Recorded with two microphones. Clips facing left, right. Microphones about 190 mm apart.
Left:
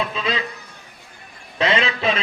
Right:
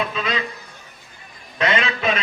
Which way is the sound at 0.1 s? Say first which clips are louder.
Left 1 dB; 30° left (ahead or behind).